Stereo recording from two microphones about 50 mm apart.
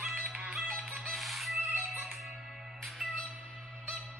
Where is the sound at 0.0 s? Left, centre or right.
Right.